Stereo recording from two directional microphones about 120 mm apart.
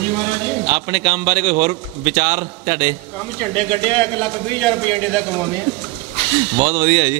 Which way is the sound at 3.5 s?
10° left (ahead or behind).